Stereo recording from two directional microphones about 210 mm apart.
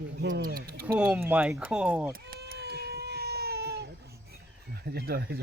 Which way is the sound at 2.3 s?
50° right (ahead or behind).